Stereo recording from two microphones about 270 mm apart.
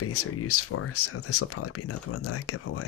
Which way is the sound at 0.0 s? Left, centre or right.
Left.